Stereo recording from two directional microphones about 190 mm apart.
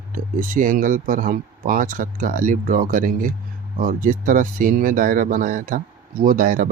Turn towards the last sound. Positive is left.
turn(degrees=-45)  # may be behind; listen again after turning